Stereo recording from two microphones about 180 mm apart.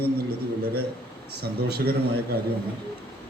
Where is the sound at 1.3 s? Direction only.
60° right (ahead or behind).